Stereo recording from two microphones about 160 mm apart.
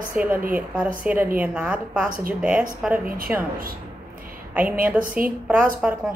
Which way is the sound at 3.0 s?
60° right (ahead or behind).